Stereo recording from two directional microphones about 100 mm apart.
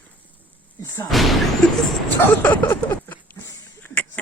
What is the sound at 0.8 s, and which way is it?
Speech, 30° left (ahead or behind).